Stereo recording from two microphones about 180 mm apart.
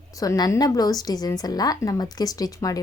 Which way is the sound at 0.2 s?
20° left (ahead or behind).